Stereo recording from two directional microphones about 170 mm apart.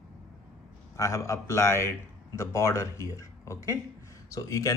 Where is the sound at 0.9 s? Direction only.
20° left (ahead or behind).